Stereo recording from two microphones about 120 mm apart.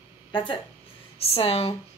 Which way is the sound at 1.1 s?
55° left (ahead or behind).